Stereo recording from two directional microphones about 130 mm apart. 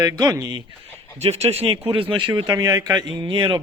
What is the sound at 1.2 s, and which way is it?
Speech, 55° right (ahead or behind).